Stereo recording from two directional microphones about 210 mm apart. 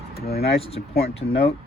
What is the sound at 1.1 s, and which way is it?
Speech, 30° left (ahead or behind).